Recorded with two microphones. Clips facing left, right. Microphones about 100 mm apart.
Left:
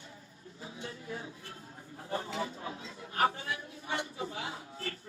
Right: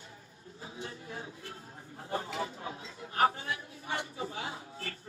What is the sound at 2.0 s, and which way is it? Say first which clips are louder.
A man's voice: even; 25° right (ahead or behind).